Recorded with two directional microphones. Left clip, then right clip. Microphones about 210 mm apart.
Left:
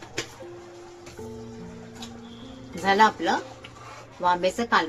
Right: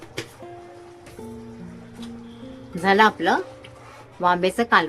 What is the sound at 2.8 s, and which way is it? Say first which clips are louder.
A woman's voice: right 3 dB; 20° right (ahead or behind).